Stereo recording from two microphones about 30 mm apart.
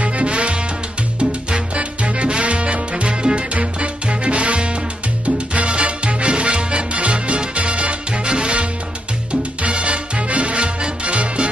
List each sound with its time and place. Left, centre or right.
0.0 s music: right